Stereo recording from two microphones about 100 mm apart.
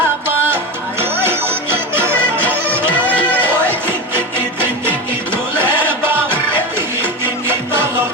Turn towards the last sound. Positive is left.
turn(degrees=-25)  # may be behind; listen again after turning